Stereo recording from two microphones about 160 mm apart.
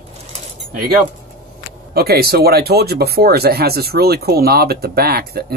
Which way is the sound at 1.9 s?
75° right (ahead or behind).